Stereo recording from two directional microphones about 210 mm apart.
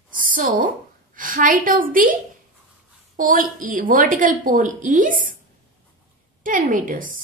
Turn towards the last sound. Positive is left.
turn(degrees=-40)  # may be behind; listen again after turning